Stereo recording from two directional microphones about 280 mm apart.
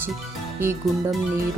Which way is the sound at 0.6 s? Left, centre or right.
Centre.